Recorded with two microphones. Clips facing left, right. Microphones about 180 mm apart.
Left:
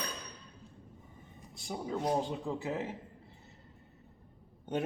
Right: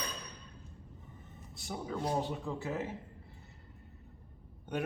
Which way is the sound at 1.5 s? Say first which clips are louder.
Left 2 dB; 15° left (ahead or behind).